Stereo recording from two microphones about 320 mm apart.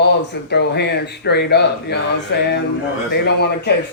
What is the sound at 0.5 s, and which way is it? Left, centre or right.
Speech, left.